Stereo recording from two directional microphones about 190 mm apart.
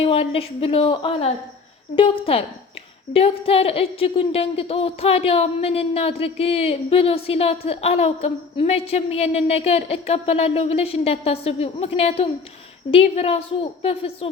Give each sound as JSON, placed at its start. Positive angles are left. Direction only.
{"t": 0.0, "sound": "a woman's voice", "side_deg": 30}